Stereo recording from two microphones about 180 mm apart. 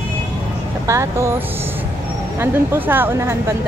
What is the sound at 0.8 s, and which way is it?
Speech, 15° right (ahead or behind).